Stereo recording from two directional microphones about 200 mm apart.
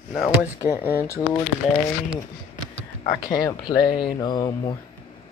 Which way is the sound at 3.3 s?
25° left (ahead or behind).